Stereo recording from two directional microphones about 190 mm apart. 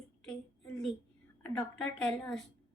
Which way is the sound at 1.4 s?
5° left (ahead or behind).